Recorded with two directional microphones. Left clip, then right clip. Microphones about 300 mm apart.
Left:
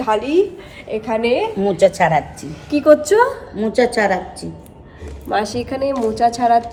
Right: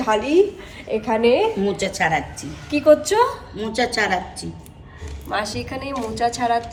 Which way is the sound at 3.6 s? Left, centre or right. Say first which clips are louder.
Left 5 dB; centre.